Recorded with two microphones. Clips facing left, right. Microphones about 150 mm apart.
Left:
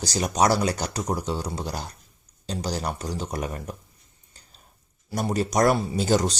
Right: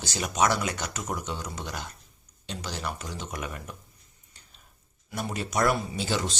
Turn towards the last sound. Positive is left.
turn(degrees=40)  # may be behind; listen again after turning